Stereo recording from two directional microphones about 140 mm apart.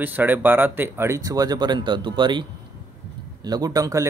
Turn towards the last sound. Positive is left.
turn(degrees=-25)  # may be behind; listen again after turning